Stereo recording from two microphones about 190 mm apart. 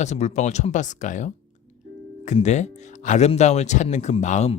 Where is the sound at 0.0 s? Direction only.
35° left (ahead or behind).